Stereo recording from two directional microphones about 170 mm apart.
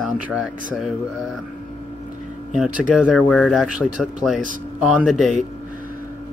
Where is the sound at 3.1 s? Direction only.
5° left (ahead or behind).